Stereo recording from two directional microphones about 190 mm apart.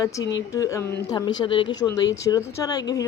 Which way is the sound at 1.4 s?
25° left (ahead or behind).